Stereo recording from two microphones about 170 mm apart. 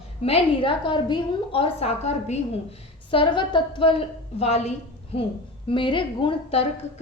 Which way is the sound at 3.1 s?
30° left (ahead or behind).